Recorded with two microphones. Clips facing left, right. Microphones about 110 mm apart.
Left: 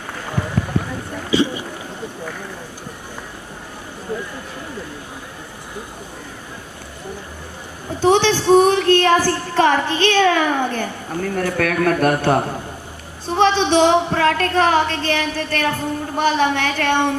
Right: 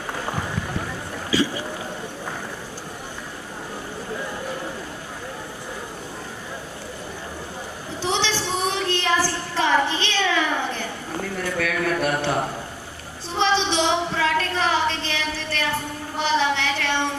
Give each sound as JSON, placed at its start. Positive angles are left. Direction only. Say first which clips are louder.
{"t": 1.3, "sound": "boat", "louder": "left 4 dB", "side_deg": 20}
{"t": 8.0, "sound": "a sound", "louder": "left 10 dB", "side_deg": 55}
{"t": 13.2, "sound": "a woman's voice", "louder": "left 6 dB", "side_deg": 55}